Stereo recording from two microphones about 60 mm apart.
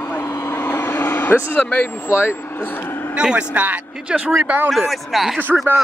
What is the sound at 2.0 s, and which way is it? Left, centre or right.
Speech, left.